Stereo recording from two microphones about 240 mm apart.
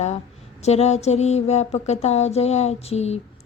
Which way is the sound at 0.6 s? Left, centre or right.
Left.